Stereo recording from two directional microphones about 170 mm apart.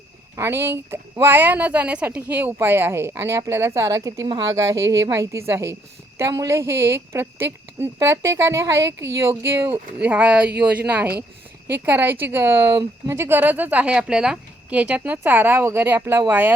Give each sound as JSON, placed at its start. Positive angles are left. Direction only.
{"t": 0.3, "sound": "speech", "side_deg": -15}